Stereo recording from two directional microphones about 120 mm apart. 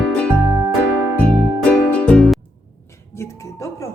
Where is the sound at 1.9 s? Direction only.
10° left (ahead or behind).